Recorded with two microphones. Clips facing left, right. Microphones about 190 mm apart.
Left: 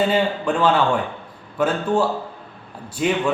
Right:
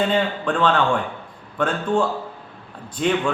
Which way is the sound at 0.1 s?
10° left (ahead or behind).